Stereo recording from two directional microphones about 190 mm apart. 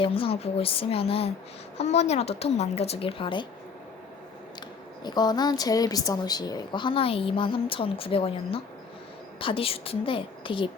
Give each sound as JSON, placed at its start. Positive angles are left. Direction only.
{"t": 0.0, "sound": "a woman's voice", "side_deg": 30}
{"t": 5.0, "sound": "a woman's voice", "side_deg": 20}